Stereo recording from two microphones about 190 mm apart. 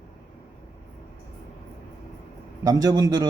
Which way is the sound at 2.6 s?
20° right (ahead or behind).